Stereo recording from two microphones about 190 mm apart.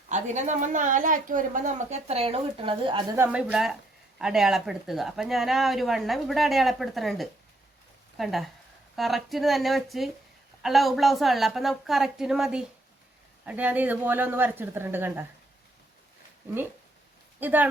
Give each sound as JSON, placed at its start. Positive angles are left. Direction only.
{"t": 0.1, "sound": "a woman's voice", "side_deg": -40}
{"t": 3.2, "sound": "a woman's voice", "side_deg": -5}
{"t": 17.4, "sound": "a woman's voice", "side_deg": -10}